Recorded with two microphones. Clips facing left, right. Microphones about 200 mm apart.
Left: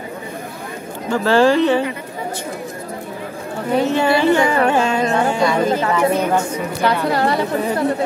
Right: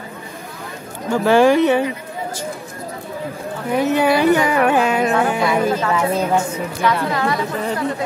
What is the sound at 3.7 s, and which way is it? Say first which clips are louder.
Carnatic music: even; 15° right (ahead or behind).